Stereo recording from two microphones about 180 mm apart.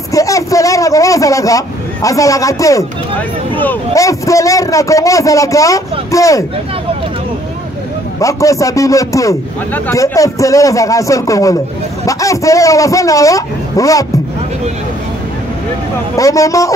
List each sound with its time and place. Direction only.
0.1 s a man's voice: 20° left (ahead or behind)
8.2 s a man's voice: 15° left (ahead or behind)
16.2 s a man's voice: 20° left (ahead or behind)